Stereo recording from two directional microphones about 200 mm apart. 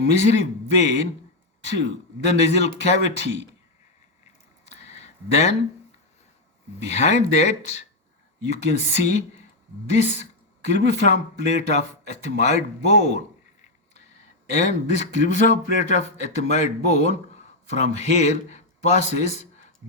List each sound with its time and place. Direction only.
0.0 s speech: 35° left (ahead or behind)
2.2 s speech: 35° left (ahead or behind)
4.3 s a sound: 35° left (ahead or behind)
6.7 s speech: 35° left (ahead or behind)
14.5 s speech: 35° left (ahead or behind)